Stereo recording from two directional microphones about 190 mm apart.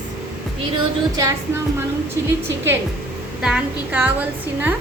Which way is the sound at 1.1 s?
15° right (ahead or behind).